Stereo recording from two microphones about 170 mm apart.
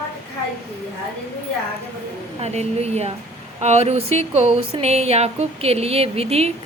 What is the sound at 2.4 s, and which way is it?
A woman's voice, 40° right (ahead or behind).